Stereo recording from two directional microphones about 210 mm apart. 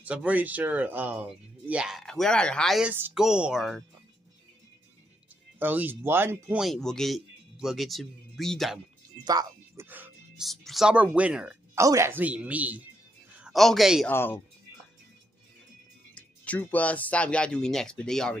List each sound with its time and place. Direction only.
0.0 s speech: 5° right (ahead or behind)
5.6 s speech: 10° right (ahead or behind)
9.2 s a man's voice: 20° right (ahead or behind); by 14.1 s centre (ahead or behind)
14.1 s speech: 10° left (ahead or behind)
16.2 s speech: 5° left (ahead or behind)